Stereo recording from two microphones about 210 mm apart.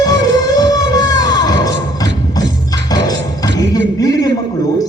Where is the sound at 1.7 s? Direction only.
20° left (ahead or behind).